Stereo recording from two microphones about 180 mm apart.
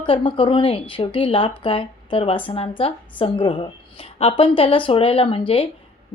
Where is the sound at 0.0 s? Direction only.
30° left (ahead or behind).